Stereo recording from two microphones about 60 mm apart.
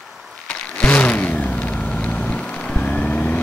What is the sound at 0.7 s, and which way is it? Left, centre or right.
Vehicle, left.